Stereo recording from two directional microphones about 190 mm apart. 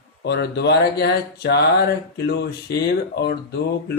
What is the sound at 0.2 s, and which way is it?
Speech, 65° left (ahead or behind).